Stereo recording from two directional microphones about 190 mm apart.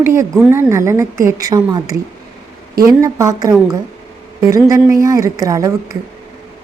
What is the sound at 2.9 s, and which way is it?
A woman's voice, 20° right (ahead or behind).